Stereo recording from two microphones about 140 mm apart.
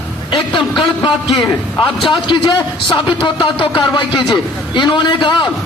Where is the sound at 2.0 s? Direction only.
35° left (ahead or behind).